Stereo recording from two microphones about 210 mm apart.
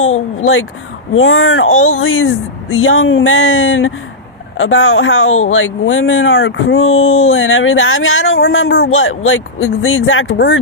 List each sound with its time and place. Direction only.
1.1 s speech: 75° left (ahead or behind)